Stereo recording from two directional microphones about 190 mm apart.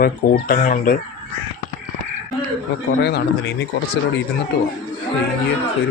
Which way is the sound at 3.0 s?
60° left (ahead or behind).